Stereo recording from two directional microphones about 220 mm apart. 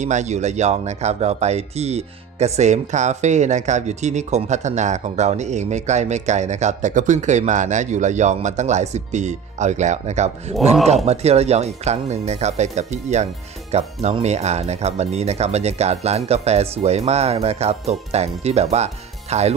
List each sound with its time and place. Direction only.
0.0 s speech: 30° right (ahead or behind)